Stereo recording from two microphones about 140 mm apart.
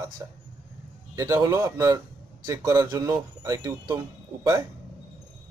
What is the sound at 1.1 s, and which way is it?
A man's voice, 25° right (ahead or behind).